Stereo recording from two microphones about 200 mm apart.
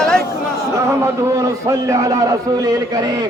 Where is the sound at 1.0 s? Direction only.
15° right (ahead or behind).